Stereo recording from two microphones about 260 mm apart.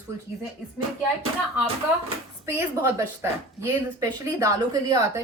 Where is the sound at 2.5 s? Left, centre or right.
Centre.